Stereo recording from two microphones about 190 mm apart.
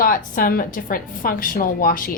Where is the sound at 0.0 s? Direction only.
50° left (ahead or behind).